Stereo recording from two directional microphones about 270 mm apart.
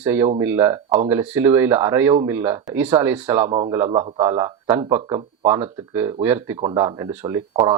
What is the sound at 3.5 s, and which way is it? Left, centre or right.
Speech, right.